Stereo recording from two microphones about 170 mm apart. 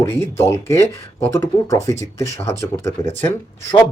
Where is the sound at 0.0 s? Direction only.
15° left (ahead or behind).